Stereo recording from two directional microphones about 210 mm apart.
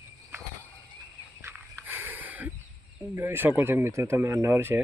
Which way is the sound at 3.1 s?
10° right (ahead or behind).